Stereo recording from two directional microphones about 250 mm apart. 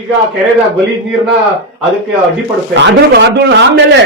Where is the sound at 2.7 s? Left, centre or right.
Right.